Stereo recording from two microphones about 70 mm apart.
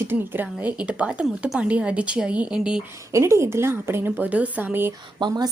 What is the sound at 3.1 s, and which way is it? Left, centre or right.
A woman's voice, right.